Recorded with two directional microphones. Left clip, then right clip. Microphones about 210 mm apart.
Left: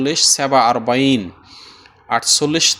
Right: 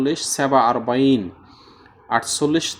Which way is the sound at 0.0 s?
35° left (ahead or behind).